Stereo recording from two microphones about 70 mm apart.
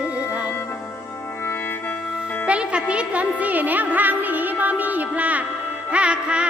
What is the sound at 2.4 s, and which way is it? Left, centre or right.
Music, centre.